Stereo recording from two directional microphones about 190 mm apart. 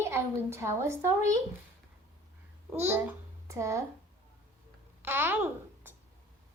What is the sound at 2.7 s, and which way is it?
A child's voice, 10° right (ahead or behind).